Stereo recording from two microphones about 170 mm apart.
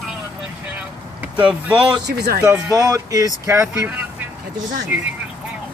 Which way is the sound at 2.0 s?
70° right (ahead or behind).